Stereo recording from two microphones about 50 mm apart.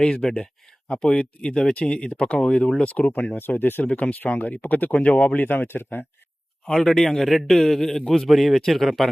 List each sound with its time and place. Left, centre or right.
0.0 s speech: centre
3.3 s speech: left
6.7 s a man's voice: centre